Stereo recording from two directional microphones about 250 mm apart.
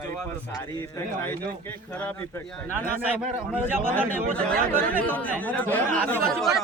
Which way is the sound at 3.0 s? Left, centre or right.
Centre.